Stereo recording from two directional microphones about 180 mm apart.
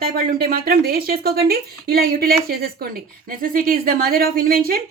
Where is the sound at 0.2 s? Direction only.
55° right (ahead or behind).